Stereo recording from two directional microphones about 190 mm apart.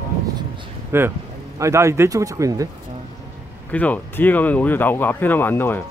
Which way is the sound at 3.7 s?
10° left (ahead or behind).